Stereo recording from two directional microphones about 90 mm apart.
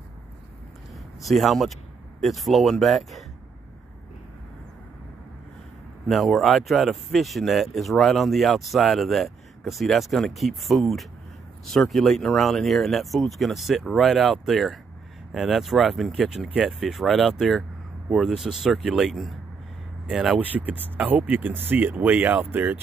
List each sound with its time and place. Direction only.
1.2 s speech: centre (ahead or behind)
6.0 s speech: centre (ahead or behind)
20.3 s speech: 15° right (ahead or behind)